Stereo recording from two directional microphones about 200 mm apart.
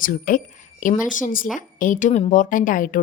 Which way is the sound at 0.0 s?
45° left (ahead or behind).